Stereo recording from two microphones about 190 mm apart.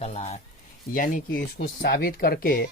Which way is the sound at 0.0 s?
35° left (ahead or behind).